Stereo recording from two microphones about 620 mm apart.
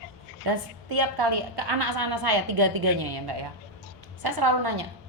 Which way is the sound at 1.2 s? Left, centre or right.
Right.